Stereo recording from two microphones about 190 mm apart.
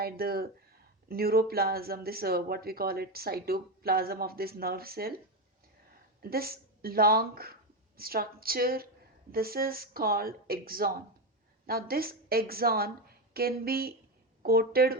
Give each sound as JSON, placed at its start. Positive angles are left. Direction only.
{"t": 0.0, "sound": "speech", "side_deg": -55}
{"t": 6.2, "sound": "a woman's voice", "side_deg": -55}